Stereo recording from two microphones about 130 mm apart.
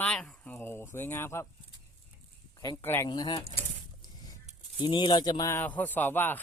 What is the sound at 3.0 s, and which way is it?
Speech, 30° left (ahead or behind).